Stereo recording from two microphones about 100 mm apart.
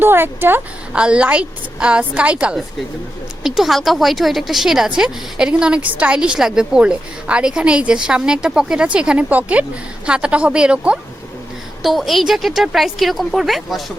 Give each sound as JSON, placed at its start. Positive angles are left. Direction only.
{"t": 0.0, "sound": "speech", "side_deg": -20}
{"t": 0.9, "sound": "a woman's voice", "side_deg": -10}